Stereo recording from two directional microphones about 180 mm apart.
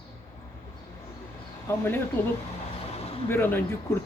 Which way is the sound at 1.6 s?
10° left (ahead or behind).